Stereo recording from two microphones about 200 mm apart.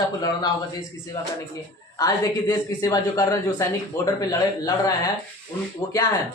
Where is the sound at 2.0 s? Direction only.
20° left (ahead or behind).